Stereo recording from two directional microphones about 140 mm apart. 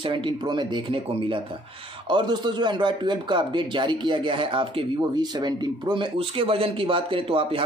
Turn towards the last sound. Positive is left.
turn(degrees=-40)  # may be behind; listen again after turning